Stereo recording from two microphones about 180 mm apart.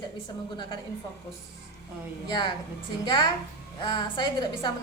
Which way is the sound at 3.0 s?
25° left (ahead or behind).